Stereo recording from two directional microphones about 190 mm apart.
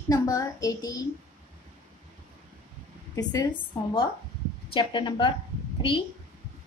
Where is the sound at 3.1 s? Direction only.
20° left (ahead or behind).